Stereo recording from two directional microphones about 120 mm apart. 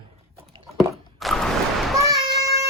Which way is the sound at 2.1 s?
25° right (ahead or behind).